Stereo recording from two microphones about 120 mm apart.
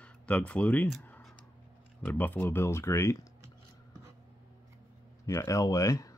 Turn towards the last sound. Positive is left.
turn(degrees=25)  # may be behind; listen again after turning